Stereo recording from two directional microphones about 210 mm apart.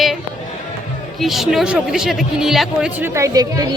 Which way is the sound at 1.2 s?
Centre (ahead or behind).